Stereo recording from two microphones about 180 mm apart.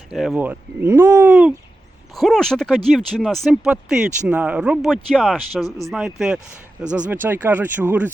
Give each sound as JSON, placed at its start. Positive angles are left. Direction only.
{"t": 0.1, "sound": "speech", "side_deg": 0}